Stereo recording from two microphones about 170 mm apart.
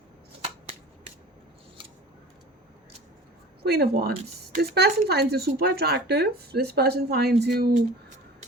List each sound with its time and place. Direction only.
0.4 s shuffling cards: 40° right (ahead or behind)
3.6 s speech: 65° right (ahead or behind)